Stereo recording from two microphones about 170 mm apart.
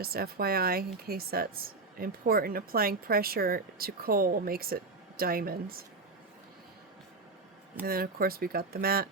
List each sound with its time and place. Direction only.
0.0 s a woman's voice: 65° right (ahead or behind)
7.9 s a woman's voice: 60° right (ahead or behind)